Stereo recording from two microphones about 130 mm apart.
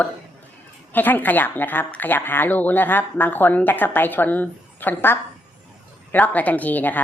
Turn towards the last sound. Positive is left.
turn(degrees=15)  # may be behind; listen again after turning